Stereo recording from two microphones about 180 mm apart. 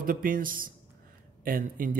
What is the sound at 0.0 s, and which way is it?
A man's voice, 50° right (ahead or behind).